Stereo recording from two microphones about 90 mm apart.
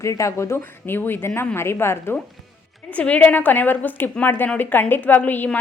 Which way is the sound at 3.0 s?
15° left (ahead or behind).